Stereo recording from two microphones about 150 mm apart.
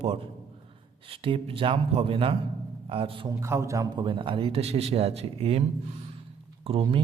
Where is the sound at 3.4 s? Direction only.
20° right (ahead or behind); by 5.6 s 40° right (ahead or behind).